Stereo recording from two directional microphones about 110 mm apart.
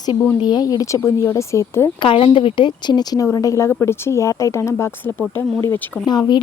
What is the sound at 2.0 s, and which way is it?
Speech, 55° left (ahead or behind).